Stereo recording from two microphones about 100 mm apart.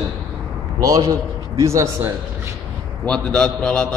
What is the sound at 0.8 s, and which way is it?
A man's voice, 40° right (ahead or behind).